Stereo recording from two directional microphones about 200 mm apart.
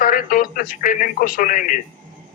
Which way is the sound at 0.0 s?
45° left (ahead or behind).